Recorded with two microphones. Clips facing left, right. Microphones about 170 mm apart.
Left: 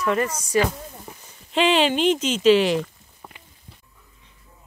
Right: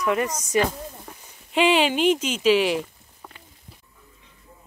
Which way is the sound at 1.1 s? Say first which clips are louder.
Left 1 dB; 10° left (ahead or behind).